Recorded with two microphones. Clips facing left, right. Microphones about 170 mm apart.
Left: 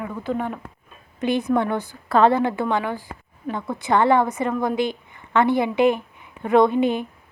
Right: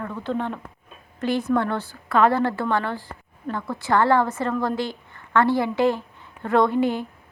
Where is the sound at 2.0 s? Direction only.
35° left (ahead or behind).